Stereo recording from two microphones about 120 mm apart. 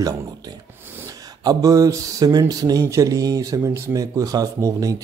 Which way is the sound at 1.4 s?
30° right (ahead or behind).